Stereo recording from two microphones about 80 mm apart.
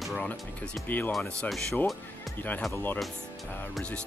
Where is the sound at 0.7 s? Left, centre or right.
Left.